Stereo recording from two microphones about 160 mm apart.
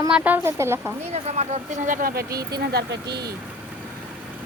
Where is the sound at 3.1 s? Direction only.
25° right (ahead or behind).